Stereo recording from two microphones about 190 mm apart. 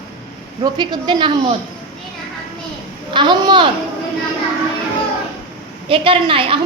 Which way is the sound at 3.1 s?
25° right (ahead or behind).